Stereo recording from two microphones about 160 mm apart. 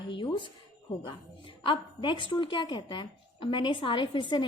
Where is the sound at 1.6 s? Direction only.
30° left (ahead or behind).